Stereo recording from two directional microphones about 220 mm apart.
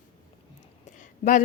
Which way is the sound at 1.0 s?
35° left (ahead or behind).